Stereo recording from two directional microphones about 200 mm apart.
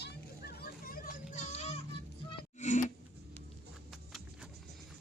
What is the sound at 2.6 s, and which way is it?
Music, 35° left (ahead or behind).